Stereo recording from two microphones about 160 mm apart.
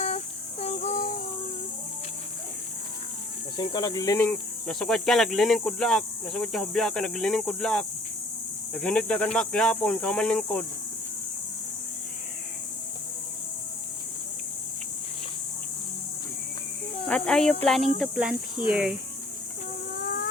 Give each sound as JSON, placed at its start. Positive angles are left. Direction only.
{"t": 0.6, "sound": "child singing", "side_deg": 45}
{"t": 3.6, "sound": "speech", "side_deg": 25}
{"t": 4.2, "sound": "speech", "side_deg": 5}
{"t": 17.1, "sound": "speech", "side_deg": 5}
{"t": 20.1, "sound": "vehicle", "side_deg": 70}